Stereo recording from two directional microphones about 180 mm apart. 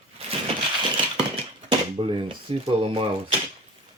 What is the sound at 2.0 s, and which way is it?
Dishes, 30° right (ahead or behind).